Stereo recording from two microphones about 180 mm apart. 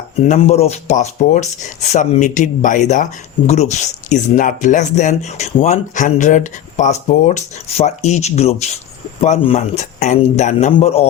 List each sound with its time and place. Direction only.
0.3 s speech: 35° left (ahead or behind)